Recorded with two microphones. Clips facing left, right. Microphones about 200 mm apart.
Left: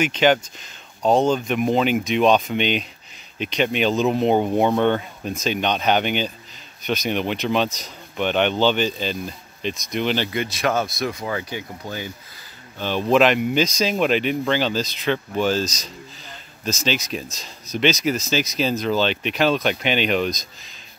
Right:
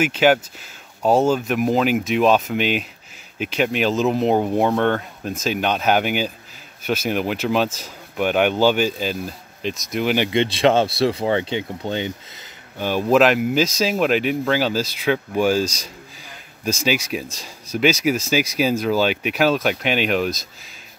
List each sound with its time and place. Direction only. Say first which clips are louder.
0.0 s speech: right 1 dB; 5° right (ahead or behind)
10.3 s speech: right 6 dB; 25° right (ahead or behind)
12.7 s speech: right 2 dB; 10° right (ahead or behind)